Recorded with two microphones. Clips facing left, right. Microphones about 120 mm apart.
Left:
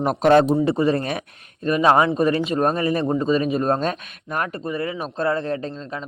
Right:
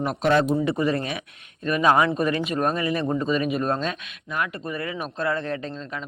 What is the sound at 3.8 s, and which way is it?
Speech, 45° left (ahead or behind).